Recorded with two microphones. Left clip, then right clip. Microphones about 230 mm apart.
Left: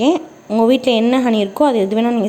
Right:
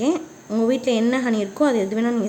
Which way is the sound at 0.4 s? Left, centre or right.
Centre.